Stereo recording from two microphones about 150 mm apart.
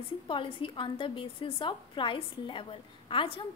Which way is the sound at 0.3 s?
35° left (ahead or behind).